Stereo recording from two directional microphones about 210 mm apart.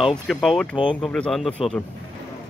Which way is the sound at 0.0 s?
Centre (ahead or behind).